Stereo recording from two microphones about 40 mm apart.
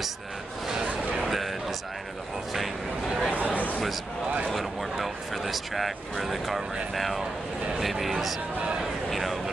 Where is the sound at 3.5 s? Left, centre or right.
Left.